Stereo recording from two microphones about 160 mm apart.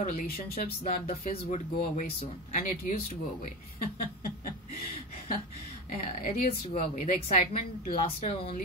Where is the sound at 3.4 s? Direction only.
55° left (ahead or behind).